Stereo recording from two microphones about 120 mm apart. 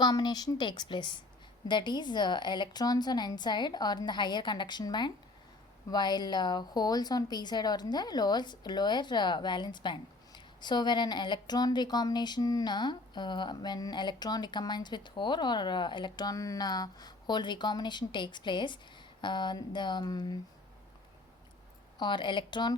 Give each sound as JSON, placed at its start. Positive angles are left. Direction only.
{"t": 0.0, "sound": "a woman's voice", "side_deg": 35}
{"t": 21.9, "sound": "a woman's voice", "side_deg": 40}